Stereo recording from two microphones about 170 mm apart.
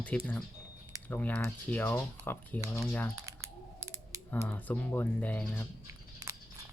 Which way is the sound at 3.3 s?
20° right (ahead or behind).